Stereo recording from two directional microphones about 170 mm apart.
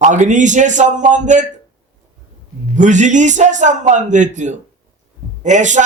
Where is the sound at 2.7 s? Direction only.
45° right (ahead or behind).